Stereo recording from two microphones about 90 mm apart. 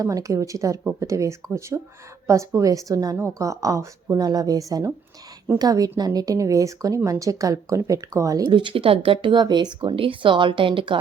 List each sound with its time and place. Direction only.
0.0 s a woman's voice: 35° right (ahead or behind)
8.4 s speech: 65° right (ahead or behind)
9.9 s a woman's voice: 80° right